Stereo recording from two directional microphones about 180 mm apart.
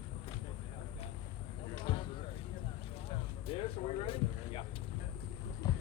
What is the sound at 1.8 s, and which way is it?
Basketball bounce, 25° left (ahead or behind).